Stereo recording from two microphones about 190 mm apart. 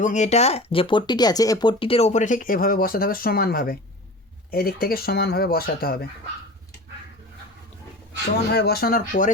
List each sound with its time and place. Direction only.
0.0 s speech: 40° left (ahead or behind)
8.5 s speech: 55° left (ahead or behind)